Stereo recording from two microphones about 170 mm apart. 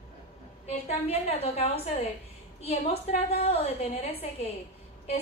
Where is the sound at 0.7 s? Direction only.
35° left (ahead or behind).